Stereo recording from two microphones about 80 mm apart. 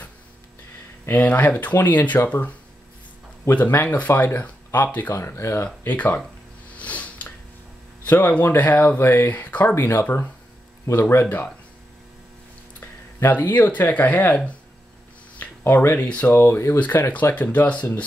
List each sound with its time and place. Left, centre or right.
1.1 s speech: left
3.5 s speech: left
4.1 s speech: left
4.7 s speech: left
5.1 s speech: left
5.9 s speech: centre
6.8 s a sound: centre
8.0 s speech: left
9.8 s speech: left
11.2 s speech: centre
12.8 s speech: left
15.3 s a sound: left
16.0 s speech: centre
17.1 s speech: centre